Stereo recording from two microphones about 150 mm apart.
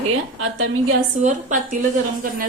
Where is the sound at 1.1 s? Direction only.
55° right (ahead or behind).